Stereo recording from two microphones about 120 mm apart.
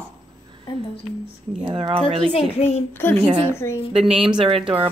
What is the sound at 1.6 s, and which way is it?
Speech, 45° right (ahead or behind).